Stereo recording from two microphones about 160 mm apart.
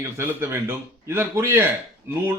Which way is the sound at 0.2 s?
10° right (ahead or behind).